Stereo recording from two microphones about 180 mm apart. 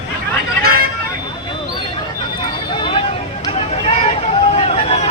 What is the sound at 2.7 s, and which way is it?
Hubbub, 30° left (ahead or behind).